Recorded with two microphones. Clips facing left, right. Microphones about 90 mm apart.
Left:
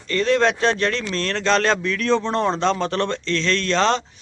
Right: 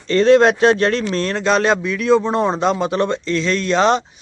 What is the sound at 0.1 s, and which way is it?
A man's voice, 25° right (ahead or behind).